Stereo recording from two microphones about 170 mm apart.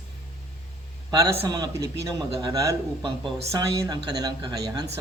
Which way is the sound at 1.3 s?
25° right (ahead or behind).